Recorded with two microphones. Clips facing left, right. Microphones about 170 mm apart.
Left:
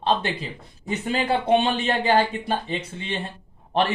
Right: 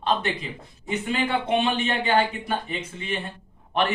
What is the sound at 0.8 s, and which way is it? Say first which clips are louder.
Speech: left 2 dB; 35° left (ahead or behind).